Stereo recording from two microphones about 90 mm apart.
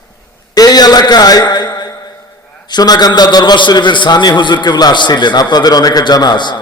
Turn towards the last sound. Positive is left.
turn(degrees=55)  # may be behind; listen again after turning